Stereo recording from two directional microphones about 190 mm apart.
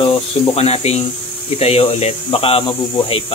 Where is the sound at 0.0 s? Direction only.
30° left (ahead or behind).